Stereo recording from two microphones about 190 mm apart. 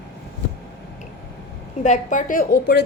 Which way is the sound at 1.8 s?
40° left (ahead or behind).